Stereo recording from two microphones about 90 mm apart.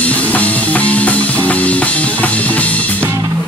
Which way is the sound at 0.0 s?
15° left (ahead or behind).